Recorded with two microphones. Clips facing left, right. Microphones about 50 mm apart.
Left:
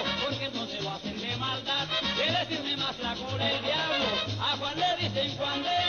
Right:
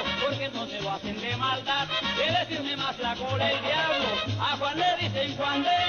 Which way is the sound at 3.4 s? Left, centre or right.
Right.